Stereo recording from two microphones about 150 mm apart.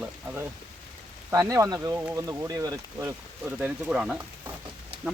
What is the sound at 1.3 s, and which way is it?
Speech, 20° right (ahead or behind).